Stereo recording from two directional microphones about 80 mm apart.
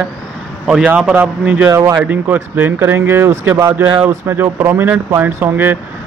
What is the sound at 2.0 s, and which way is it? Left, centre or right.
Speech, right.